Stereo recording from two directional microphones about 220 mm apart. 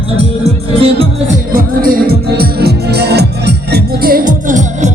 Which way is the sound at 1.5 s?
40° right (ahead or behind).